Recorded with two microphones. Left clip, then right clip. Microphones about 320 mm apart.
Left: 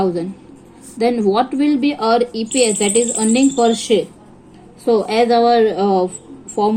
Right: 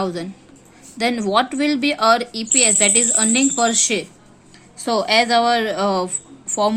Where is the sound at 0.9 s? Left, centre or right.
Right.